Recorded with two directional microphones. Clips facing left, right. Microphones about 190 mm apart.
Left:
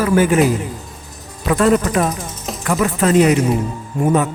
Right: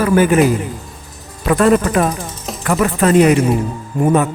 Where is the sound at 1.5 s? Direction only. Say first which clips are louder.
Right 2 dB; 55° right (ahead or behind).